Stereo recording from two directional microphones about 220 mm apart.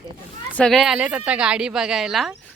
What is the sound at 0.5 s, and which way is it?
A woman's voice, centre (ahead or behind).